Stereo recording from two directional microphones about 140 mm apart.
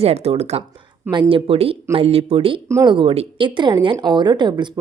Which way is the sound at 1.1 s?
35° right (ahead or behind).